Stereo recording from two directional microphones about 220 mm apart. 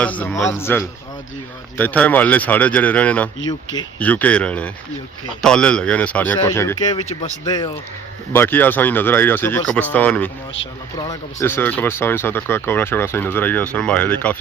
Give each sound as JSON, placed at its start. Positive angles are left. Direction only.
{"t": 0.0, "sound": "speech", "side_deg": 5}
{"t": 3.3, "sound": "speech", "side_deg": 60}
{"t": 4.0, "sound": "speech", "side_deg": 5}